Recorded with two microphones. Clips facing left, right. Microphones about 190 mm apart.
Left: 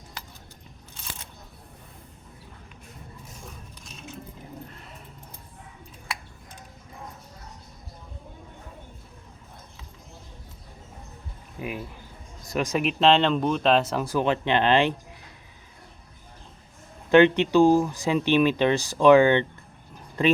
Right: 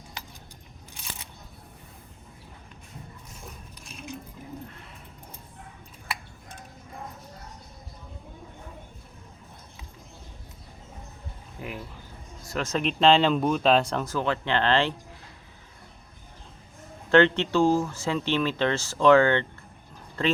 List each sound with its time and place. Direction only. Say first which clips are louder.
11.6 s a sound: left 4 dB; 15° left (ahead or behind)
12.5 s speech: left 2 dB; 15° left (ahead or behind)
17.1 s speech: left 3 dB; 15° left (ahead or behind)